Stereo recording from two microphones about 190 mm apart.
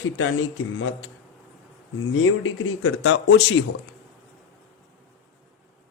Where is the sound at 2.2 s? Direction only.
90° left.